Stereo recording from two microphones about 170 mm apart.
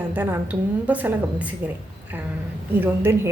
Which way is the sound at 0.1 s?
10° right (ahead or behind).